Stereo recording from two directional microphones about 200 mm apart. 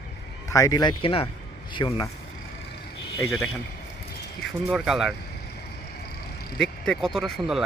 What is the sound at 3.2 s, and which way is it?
Speech, 15° left (ahead or behind).